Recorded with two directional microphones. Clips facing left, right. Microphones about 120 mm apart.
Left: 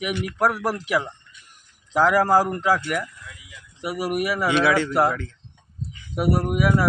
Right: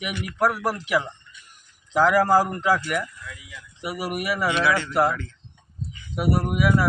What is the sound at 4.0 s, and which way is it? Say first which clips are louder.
Speech: left 3 dB; 5° left (ahead or behind).